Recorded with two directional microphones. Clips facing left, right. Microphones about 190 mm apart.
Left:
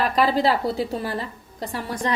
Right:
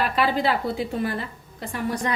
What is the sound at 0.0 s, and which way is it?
A woman's voice, 40° left (ahead or behind).